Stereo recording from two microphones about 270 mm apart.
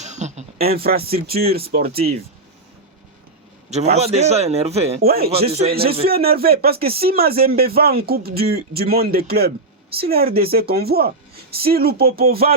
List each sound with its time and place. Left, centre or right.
0.0 s speech: right
3.7 s a man's voice: right
5.0 s speech: right
5.5 s a man's voice: right
5.7 s speech: right